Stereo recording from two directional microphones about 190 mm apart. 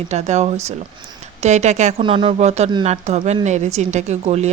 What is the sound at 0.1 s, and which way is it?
Speech, 35° right (ahead or behind).